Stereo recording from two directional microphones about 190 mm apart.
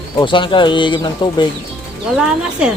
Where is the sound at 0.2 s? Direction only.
25° left (ahead or behind).